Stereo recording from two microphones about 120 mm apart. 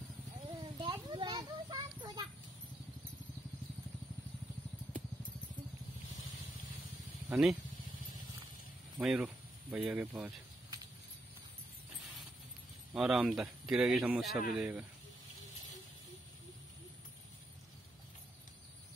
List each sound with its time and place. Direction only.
0.5 s a sound: 45° right (ahead or behind)
1.0 s children playing: 40° right (ahead or behind)
7.2 s speech: 5° right (ahead or behind)
9.0 s speech: 5° right (ahead or behind)
12.9 s a man's voice: 5° right (ahead or behind)